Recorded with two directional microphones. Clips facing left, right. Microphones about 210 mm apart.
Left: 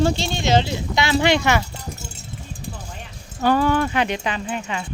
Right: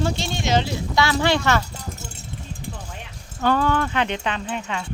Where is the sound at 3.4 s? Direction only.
10° left (ahead or behind).